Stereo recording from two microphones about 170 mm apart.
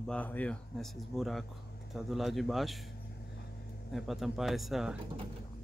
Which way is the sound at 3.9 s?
Centre (ahead or behind).